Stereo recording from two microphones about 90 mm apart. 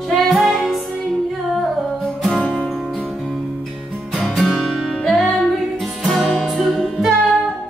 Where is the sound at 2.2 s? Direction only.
10° left (ahead or behind).